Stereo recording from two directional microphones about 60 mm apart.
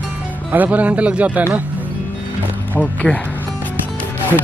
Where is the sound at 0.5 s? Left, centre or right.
Right.